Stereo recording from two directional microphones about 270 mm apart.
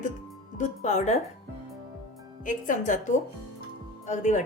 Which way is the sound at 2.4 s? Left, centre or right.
Left.